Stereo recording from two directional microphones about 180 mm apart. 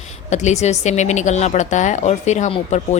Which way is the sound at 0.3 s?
40° left (ahead or behind).